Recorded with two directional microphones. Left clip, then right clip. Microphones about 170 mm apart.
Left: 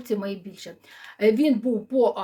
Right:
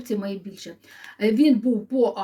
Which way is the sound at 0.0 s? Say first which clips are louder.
Left 1 dB; 25° left (ahead or behind).